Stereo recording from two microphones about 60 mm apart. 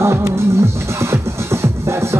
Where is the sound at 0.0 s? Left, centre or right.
Right.